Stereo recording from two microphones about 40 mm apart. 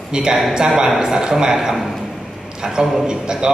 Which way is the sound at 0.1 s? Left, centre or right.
Centre.